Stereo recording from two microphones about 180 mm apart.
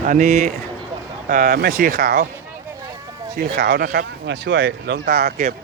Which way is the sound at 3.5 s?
65° right (ahead or behind).